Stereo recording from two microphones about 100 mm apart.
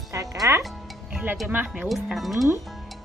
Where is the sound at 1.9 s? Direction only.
Centre (ahead or behind).